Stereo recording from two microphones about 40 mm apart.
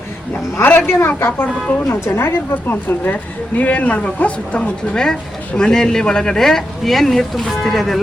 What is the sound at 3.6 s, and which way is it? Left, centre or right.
Speech, left.